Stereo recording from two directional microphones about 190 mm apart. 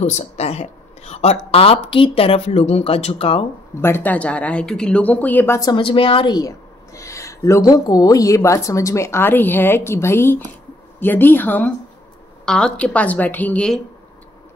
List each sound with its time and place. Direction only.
0.0 s speech: 35° left (ahead or behind)
3.8 s speech: 10° left (ahead or behind)